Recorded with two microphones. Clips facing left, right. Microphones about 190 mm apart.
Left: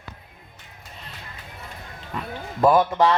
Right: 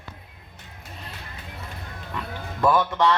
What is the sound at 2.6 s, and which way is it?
Speech, 20° left (ahead or behind).